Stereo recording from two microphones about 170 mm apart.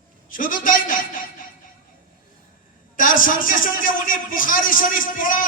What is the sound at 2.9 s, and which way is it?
A man's voice, 55° left (ahead or behind).